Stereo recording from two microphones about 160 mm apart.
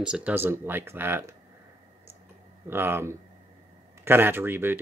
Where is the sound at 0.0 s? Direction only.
5° right (ahead or behind).